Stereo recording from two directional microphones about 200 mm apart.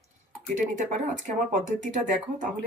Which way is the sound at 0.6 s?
40° right (ahead or behind).